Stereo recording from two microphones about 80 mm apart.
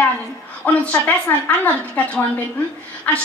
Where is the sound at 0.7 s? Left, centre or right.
Centre.